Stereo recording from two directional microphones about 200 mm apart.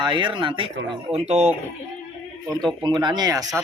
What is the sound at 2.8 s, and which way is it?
Speech, 20° right (ahead or behind).